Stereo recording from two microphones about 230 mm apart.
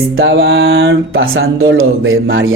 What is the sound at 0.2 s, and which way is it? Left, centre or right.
Speech, right.